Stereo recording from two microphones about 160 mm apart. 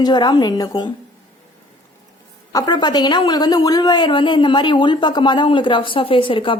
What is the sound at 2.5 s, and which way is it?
A woman's voice, 25° left (ahead or behind).